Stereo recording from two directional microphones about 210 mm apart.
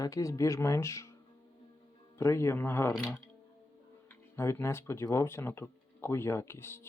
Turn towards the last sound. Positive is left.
turn(degrees=10)  # may be behind; listen again after turning